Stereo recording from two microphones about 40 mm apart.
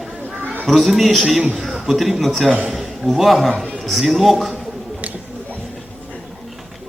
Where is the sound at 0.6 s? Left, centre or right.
Centre.